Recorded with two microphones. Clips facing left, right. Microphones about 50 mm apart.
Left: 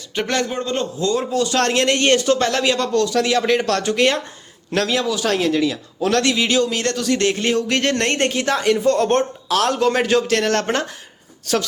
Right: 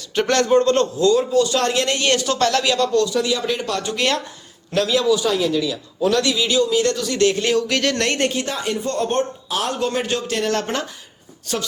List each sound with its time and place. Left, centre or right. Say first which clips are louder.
0.1 s a man's voice: right 6 dB; centre
0.9 s speech: right 4 dB; left
1.3 s speech: right 1 dB; left
2.0 s speech: left 2 dB; left
3.1 s speech: left 4 dB; left
5.1 s speech: even; left
6.0 s speech: left 1 dB; left
8.3 s speech: left 5 dB; left
11.5 s speech: left 5 dB; left